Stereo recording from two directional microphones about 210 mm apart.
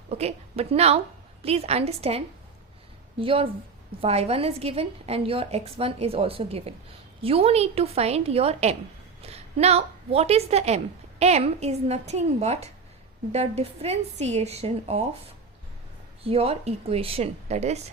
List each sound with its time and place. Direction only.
0.1 s a woman's voice: 30° right (ahead or behind)
16.2 s a woman's voice: 30° right (ahead or behind)